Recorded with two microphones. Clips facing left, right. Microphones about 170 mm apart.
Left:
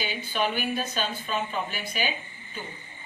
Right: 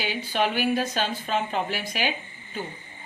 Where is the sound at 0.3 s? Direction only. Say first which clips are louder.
Right 4 dB; 70° right (ahead or behind).